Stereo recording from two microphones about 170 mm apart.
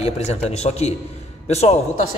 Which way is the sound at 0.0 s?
40° left (ahead or behind).